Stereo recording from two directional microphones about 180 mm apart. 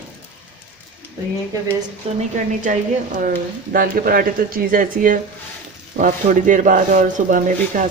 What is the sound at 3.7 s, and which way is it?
Speech, 55° right (ahead or behind).